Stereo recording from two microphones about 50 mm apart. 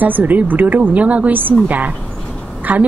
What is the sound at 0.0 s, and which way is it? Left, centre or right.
A woman's voice, right.